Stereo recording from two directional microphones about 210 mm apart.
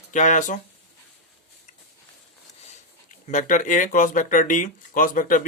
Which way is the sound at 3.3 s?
35° left (ahead or behind).